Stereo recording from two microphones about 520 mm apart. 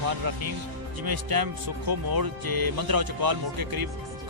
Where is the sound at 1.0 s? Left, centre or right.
Right.